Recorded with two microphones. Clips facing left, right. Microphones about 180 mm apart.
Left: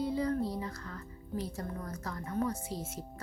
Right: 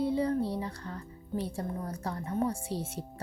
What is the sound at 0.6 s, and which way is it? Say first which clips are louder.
A woman's voice: right 3 dB; 30° right (ahead or behind).